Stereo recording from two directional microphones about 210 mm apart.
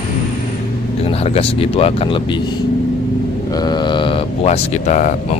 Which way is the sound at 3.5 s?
20° left (ahead or behind).